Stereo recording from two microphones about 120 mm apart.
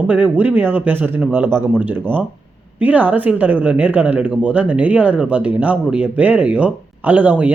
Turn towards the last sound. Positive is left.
turn(degrees=-15)  # may be behind; listen again after turning